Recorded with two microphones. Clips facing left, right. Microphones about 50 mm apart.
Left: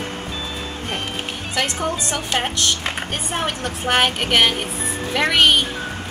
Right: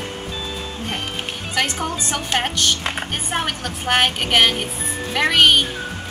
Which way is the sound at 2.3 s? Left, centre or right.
Centre.